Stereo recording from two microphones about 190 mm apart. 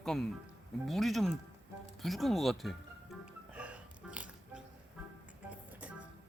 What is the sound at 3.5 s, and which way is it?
Music, 5° right (ahead or behind).